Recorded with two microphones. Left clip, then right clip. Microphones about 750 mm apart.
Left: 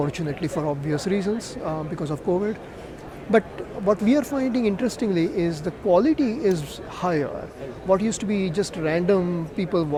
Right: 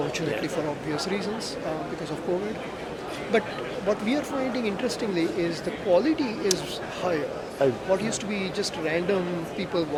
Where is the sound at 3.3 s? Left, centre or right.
Left.